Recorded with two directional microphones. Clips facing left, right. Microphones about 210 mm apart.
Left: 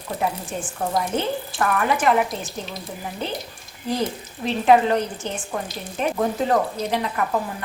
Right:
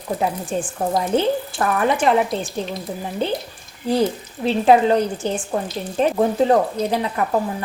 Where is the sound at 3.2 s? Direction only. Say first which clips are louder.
Right 7 dB; 30° right (ahead or behind).